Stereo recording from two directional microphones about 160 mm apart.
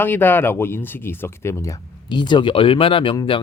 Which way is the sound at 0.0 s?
10° left (ahead or behind).